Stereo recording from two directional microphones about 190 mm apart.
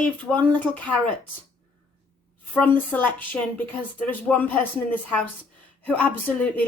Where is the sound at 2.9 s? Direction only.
10° left (ahead or behind).